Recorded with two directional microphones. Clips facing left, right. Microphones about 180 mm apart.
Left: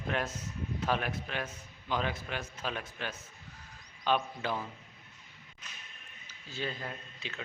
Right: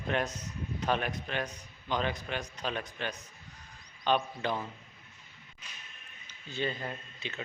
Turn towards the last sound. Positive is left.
turn(degrees=0)  # may be behind; listen again after turning